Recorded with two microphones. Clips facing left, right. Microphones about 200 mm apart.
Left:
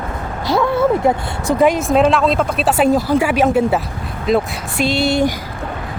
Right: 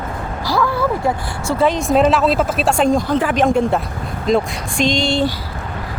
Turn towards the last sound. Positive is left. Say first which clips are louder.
# left 1 dB
turn(degrees=10)  # may be behind; listen again after turning